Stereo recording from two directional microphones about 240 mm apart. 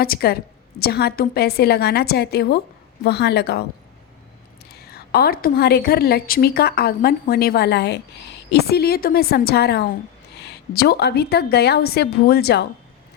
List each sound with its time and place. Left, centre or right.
0.0 s a woman's voice: left
4.7 s a woman's voice: left